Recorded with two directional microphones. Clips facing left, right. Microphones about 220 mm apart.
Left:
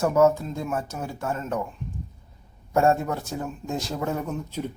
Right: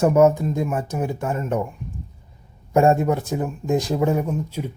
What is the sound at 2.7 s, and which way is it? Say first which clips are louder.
Speech: right 5 dB; 15° right (ahead or behind).